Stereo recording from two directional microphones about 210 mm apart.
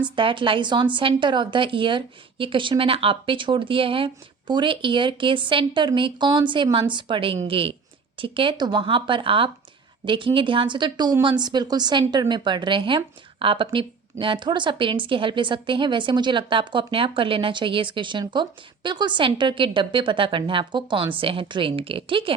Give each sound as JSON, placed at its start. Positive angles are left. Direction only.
{"t": 0.0, "sound": "a woman's voice", "side_deg": -25}